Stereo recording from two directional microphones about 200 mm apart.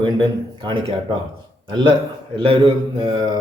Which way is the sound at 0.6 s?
25° right (ahead or behind).